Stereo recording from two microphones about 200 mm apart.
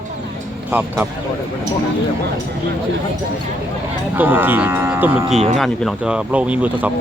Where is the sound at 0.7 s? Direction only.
10° right (ahead or behind).